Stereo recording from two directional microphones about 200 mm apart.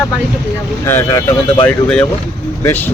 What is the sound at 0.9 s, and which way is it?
Speech, 15° left (ahead or behind).